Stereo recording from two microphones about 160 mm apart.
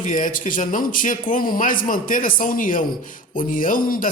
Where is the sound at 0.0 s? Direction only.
55° left (ahead or behind).